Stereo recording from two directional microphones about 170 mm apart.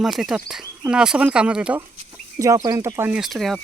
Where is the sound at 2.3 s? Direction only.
20° right (ahead or behind).